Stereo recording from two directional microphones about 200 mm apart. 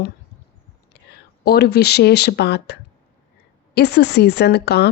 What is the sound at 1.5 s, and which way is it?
A woman's voice, 55° left (ahead or behind).